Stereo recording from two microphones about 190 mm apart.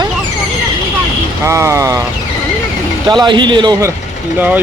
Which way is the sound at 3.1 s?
25° right (ahead or behind).